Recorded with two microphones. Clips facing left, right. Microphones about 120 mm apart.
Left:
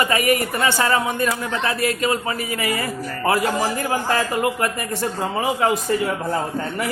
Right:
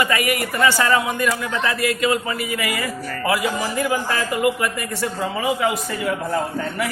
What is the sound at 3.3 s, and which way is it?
Speech, 45° left (ahead or behind).